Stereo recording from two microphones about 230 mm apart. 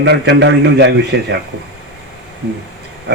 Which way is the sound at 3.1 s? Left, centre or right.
Right.